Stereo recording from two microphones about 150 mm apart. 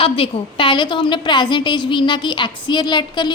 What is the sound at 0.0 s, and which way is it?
A woman's voice, 35° left (ahead or behind).